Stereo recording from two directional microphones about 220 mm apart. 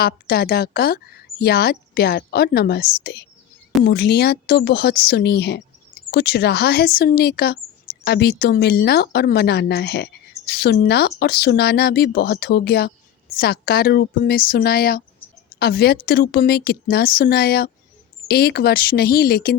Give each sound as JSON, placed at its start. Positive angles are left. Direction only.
{"t": 0.0, "sound": "speech", "side_deg": 45}